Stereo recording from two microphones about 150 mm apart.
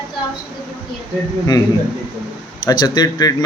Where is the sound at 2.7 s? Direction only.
25° left (ahead or behind).